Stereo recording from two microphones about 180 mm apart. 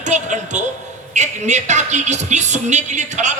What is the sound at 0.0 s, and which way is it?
A man's voice, 40° right (ahead or behind).